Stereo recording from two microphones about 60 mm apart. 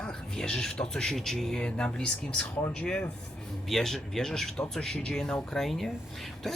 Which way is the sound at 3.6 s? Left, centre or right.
Centre.